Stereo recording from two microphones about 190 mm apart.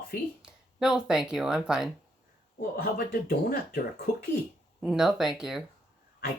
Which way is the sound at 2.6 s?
50° left (ahead or behind).